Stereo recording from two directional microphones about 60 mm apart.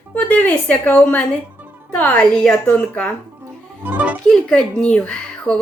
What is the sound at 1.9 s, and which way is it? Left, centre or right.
Speech, left.